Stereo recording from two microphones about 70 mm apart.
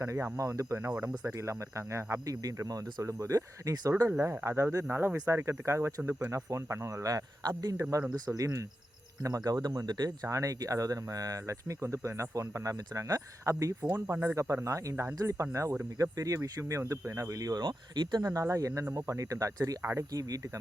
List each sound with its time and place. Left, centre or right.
0.0 s speech: right
0.9 s speech: centre
1.4 s speech: right
2.2 s speech: right
7.8 s speech: right
10.2 s speech: right
14.1 s speech: right
14.3 s speech: right
18.3 s speech: right
19.8 s speech: right